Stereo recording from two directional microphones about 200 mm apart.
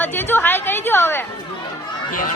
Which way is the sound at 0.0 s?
10° left (ahead or behind).